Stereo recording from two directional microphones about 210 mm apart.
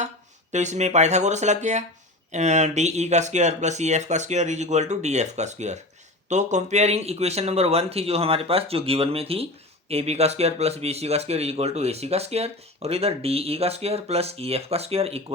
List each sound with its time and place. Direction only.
0.5 s speech: 35° right (ahead or behind)